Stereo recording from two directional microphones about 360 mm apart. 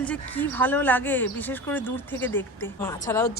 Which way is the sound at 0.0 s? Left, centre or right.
Centre.